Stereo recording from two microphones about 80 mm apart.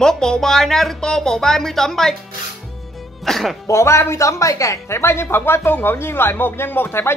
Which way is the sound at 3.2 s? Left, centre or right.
Centre.